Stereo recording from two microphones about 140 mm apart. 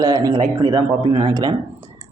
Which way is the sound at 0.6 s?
35° right (ahead or behind).